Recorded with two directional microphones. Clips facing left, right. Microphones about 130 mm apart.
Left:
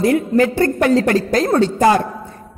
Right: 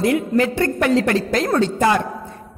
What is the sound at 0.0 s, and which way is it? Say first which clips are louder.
A woman's voice: left 3 dB; 40° left (ahead or behind).